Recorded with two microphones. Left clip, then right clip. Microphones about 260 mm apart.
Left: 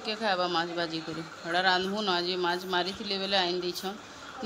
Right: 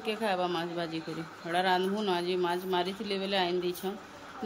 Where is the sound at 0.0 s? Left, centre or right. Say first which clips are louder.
Left 2 dB; centre.